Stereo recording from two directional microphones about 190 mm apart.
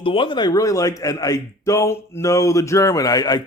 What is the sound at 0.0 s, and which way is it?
A man's voice, 25° left (ahead or behind).